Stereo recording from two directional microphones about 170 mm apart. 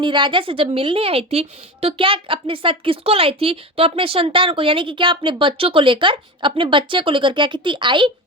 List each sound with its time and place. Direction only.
0.0 s a woman's voice: 30° right (ahead or behind)